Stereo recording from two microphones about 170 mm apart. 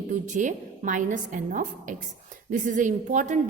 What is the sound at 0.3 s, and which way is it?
A woman's voice, 45° right (ahead or behind).